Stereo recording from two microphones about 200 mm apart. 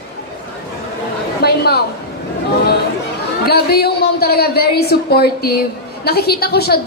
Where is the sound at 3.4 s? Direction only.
50° left (ahead or behind).